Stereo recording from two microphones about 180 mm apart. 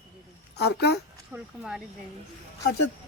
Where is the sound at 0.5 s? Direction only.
65° left (ahead or behind).